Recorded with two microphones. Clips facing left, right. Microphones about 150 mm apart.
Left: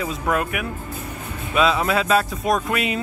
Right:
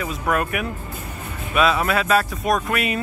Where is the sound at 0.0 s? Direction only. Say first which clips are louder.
Even; 20° left (ahead or behind).